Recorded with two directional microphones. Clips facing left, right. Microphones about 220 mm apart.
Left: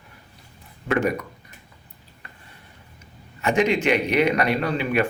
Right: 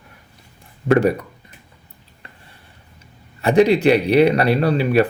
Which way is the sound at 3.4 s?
35° right (ahead or behind).